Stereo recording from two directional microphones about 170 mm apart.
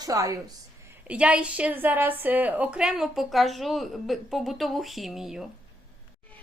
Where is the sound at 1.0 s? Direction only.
5° right (ahead or behind).